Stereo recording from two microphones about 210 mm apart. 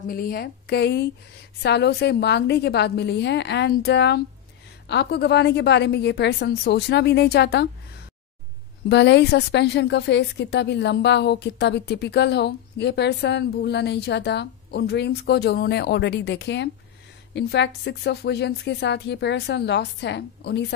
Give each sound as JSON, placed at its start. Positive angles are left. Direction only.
{"t": 0.0, "sound": "a woman's voice", "side_deg": 45}
{"t": 8.8, "sound": "a woman's voice", "side_deg": 55}